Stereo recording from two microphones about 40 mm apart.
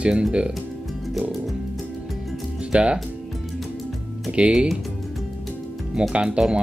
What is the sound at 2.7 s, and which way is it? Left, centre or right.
Speech, right.